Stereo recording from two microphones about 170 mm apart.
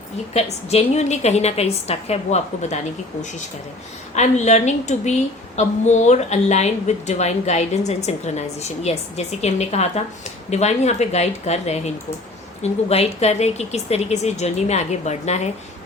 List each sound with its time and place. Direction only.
0.3 s a woman's voice: 40° left (ahead or behind)
4.1 s a woman's voice: 40° left (ahead or behind)